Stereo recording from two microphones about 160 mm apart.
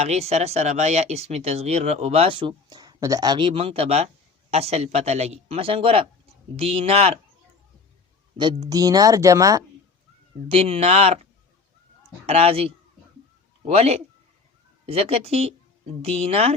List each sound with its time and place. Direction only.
0.0 s speech: 40° right (ahead or behind)
8.7 s speech: 25° right (ahead or behind)
10.5 s speech: 40° right (ahead or behind)